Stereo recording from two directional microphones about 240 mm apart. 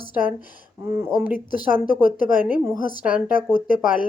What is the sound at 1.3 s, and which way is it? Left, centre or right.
Speech, left.